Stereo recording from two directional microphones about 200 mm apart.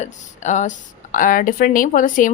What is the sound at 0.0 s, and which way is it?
Speech, 35° left (ahead or behind).